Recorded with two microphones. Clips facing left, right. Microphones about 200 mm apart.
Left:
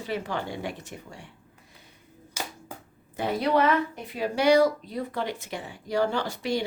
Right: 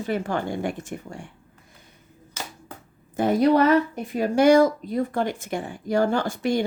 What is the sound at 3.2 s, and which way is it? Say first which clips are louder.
Speech: right 6 dB; 45° right (ahead or behind).